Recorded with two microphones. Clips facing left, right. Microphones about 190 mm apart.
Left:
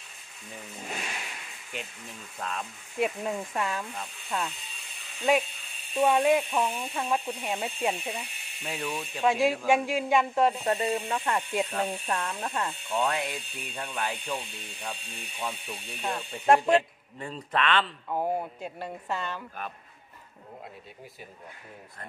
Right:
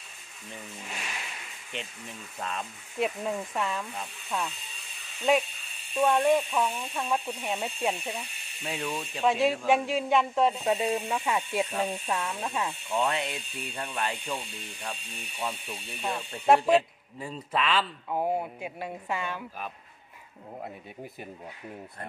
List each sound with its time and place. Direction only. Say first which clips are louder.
1.7 s speech: right 1 dB; centre (ahead or behind)
6.6 s speech: even; 20° left (ahead or behind)
6.9 s speech: left 1 dB; centre (ahead or behind)
15.3 s speech: right 1 dB; 5° right (ahead or behind)